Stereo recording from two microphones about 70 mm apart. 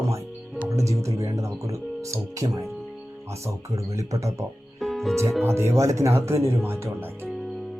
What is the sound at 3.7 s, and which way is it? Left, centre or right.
Speech, right.